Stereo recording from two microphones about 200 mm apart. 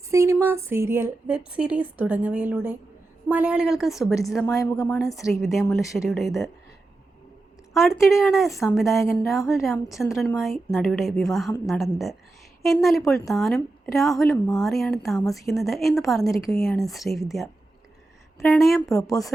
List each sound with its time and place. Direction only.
0.1 s a woman's voice: 15° right (ahead or behind)
4.4 s a woman's voice: 15° left (ahead or behind)
5.0 s a woman's voice: centre (ahead or behind)
7.7 s a woman's voice: centre (ahead or behind)
18.9 s a woman's voice: 15° left (ahead or behind)